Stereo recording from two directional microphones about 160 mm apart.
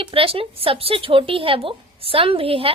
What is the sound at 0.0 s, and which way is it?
A woman's voice, 35° right (ahead or behind).